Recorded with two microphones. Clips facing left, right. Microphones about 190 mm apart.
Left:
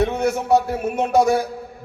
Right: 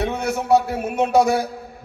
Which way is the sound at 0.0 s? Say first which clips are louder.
Left 4 dB; 50° left (ahead or behind).